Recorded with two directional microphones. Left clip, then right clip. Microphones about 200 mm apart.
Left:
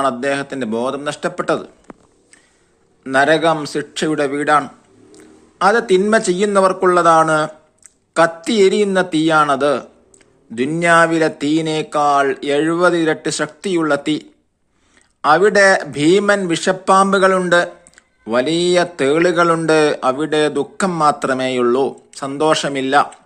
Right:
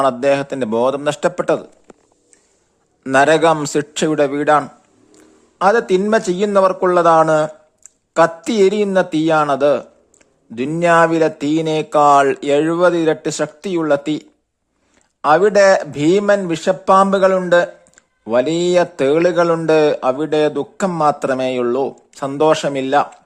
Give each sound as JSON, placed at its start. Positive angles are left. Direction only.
{"t": 0.0, "sound": "a man's voice", "side_deg": -45}
{"t": 3.0, "sound": "a man's voice", "side_deg": -50}
{"t": 22.2, "sound": "speech", "side_deg": -40}